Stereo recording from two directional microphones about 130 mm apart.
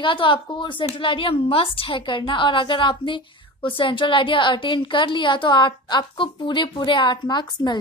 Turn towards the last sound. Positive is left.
turn(degrees=35)  # may be behind; listen again after turning